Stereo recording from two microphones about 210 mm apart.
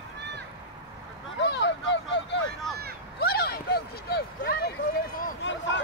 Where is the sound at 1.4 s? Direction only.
55° left (ahead or behind).